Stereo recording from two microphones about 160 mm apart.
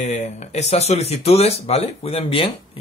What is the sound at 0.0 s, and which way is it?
Speech, 45° left (ahead or behind).